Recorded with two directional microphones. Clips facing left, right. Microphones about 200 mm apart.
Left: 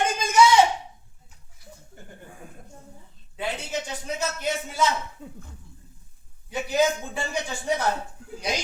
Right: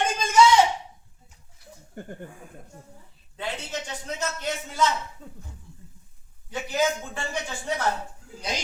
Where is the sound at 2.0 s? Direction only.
55° right (ahead or behind).